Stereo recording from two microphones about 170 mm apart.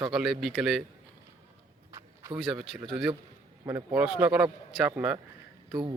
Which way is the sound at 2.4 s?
Centre (ahead or behind).